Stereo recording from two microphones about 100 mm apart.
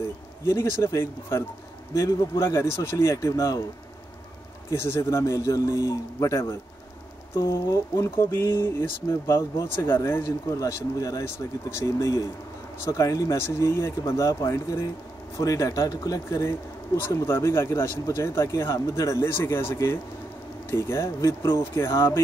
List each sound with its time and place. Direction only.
0.5 s a man's voice: 30° left (ahead or behind)
4.6 s a man's voice: 25° left (ahead or behind)